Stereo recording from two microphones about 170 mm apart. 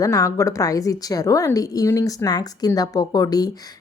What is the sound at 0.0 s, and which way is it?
Speech, 20° left (ahead or behind).